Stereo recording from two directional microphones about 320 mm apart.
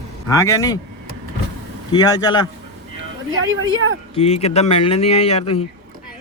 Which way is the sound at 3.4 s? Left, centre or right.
Right.